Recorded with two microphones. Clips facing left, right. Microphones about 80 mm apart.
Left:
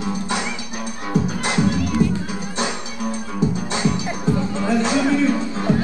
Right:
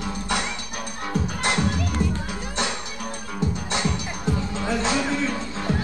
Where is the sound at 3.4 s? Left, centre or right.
Centre.